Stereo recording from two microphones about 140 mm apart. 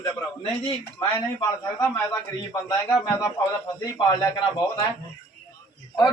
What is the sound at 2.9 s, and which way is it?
Speech, 20° left (ahead or behind).